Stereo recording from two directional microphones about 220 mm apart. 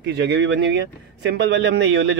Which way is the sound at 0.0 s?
50° right (ahead or behind).